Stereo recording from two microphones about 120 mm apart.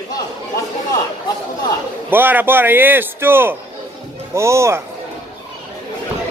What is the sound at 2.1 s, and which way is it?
A man's voice, 15° right (ahead or behind).